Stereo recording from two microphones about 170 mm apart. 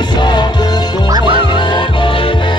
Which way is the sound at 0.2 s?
25° left (ahead or behind).